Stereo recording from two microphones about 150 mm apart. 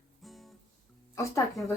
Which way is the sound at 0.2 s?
Centre (ahead or behind).